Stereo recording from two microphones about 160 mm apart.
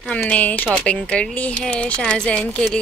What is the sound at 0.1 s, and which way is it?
A woman's voice, 10° left (ahead or behind).